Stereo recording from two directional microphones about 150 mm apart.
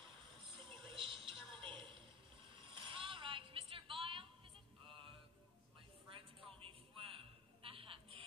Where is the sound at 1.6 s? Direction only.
35° right (ahead or behind).